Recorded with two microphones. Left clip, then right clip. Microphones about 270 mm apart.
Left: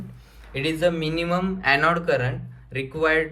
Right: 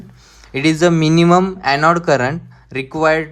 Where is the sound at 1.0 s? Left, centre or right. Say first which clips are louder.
Right 12 dB; right.